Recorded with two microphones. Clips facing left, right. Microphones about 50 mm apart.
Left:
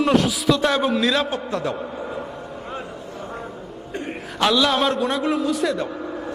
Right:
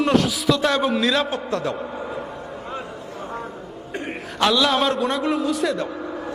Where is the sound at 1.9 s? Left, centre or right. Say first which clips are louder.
Even; centre.